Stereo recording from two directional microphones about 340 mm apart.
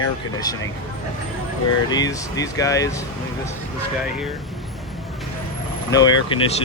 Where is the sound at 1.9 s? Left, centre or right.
Centre.